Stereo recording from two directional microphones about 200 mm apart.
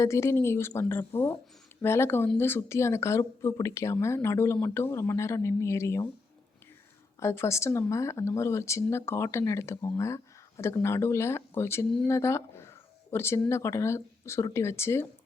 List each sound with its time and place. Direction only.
0.0 s speech: 15° left (ahead or behind)
7.2 s speech: 15° left (ahead or behind)